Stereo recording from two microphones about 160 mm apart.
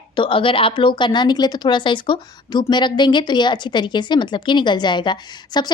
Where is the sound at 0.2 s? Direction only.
30° left (ahead or behind).